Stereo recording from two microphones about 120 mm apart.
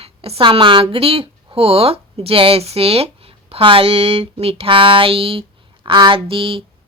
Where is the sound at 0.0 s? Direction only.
55° right (ahead or behind).